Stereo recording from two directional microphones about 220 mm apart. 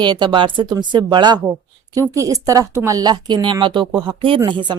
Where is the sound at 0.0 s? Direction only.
20° right (ahead or behind).